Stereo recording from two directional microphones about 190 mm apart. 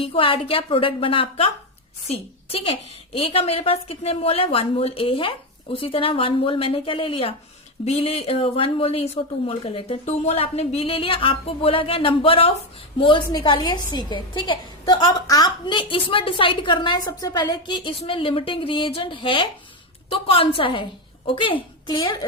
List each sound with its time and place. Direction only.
0.0 s a woman's voice: 30° left (ahead or behind)